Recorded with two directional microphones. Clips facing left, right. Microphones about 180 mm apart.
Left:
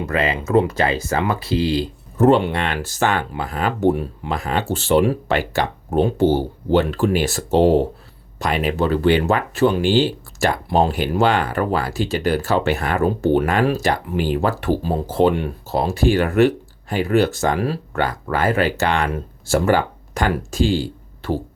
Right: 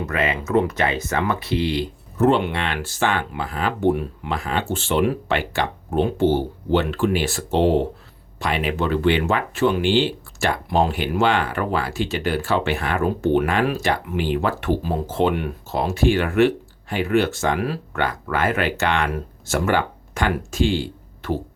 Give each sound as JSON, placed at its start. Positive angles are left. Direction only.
{"t": 0.0, "sound": "speech", "side_deg": 30}